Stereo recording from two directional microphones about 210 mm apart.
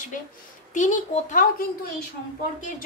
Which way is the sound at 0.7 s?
35° left (ahead or behind).